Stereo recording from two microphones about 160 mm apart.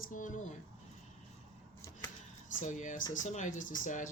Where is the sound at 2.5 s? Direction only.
50° left (ahead or behind).